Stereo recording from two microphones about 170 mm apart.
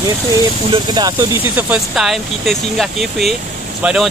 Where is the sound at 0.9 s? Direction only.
25° right (ahead or behind).